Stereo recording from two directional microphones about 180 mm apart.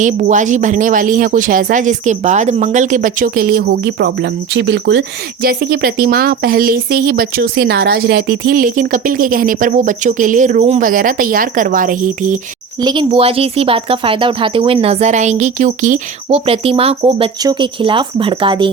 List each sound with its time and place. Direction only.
0.0 s speech: 45° right (ahead or behind)
12.8 s speech: 25° right (ahead or behind); by 16.0 s 45° right (ahead or behind)
16.3 s speech: 30° right (ahead or behind)